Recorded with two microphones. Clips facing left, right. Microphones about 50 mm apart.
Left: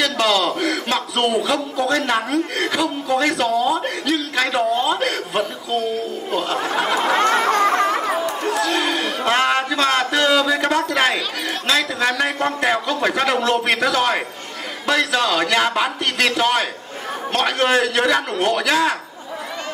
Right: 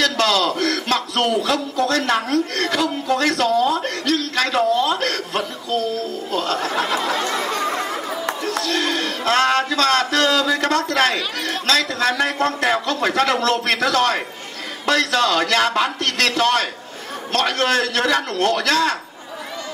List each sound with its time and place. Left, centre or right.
0.0 s a man's voice: centre
4.8 s a sound: centre
6.3 s speech: centre
7.0 s chatter: left
8.5 s a man's voice: centre